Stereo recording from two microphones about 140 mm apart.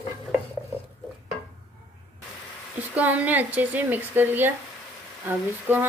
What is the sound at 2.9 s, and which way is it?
A woman's voice, 10° right (ahead or behind).